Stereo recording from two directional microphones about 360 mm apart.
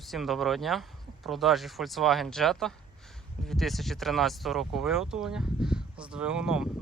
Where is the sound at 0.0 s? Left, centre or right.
Centre.